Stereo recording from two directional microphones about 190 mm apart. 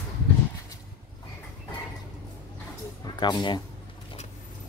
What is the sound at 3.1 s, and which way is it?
Speech, 25° left (ahead or behind).